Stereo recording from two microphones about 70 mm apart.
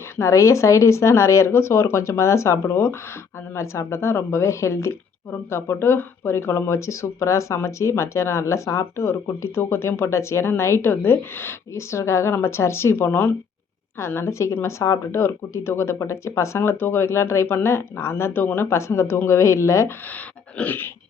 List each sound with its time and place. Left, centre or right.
0.2 s speech: left
11.7 s speech: left
14.1 s speech: left
20.6 s a sound: left